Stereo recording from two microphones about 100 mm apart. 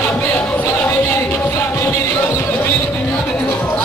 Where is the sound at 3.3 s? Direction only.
10° left (ahead or behind).